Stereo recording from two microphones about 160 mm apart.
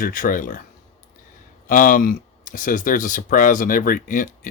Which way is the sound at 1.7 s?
60° left (ahead or behind).